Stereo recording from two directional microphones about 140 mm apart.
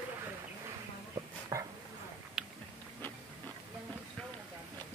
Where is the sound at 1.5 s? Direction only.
20° right (ahead or behind).